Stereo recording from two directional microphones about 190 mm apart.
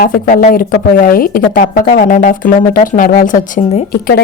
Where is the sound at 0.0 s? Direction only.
50° left (ahead or behind).